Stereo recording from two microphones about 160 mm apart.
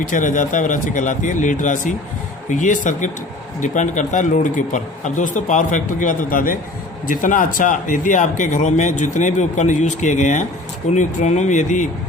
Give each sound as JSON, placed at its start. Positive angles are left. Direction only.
{"t": 0.1, "sound": "speech", "side_deg": 55}